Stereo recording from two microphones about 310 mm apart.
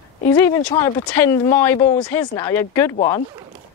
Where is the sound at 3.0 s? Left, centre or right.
Centre.